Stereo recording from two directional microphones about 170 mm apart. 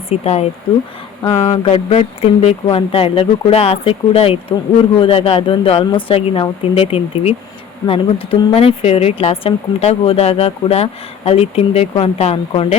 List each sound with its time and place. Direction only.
0.1 s speech: 40° left (ahead or behind)
1.5 s speech: 35° left (ahead or behind)